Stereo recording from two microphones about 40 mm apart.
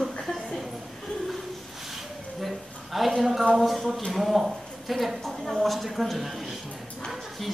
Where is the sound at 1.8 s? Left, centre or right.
Centre.